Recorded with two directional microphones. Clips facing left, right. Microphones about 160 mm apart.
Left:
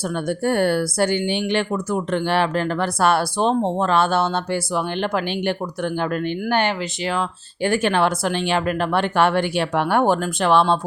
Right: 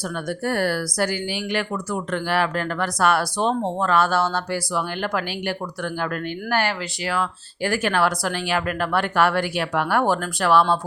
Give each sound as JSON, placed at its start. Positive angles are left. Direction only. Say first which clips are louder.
{"t": 0.1, "sound": "speech", "louder": "left 5 dB", "side_deg": 25}